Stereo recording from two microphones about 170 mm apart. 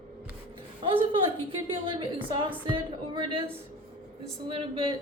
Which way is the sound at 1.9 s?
30° right (ahead or behind).